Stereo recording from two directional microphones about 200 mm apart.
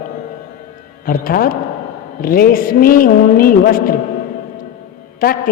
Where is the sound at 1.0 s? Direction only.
45° left (ahead or behind).